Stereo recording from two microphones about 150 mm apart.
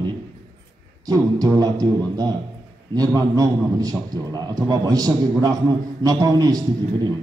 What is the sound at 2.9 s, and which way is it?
A man's voice, 25° right (ahead or behind).